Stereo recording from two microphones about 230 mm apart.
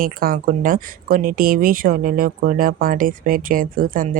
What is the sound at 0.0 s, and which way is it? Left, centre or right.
Speech, right.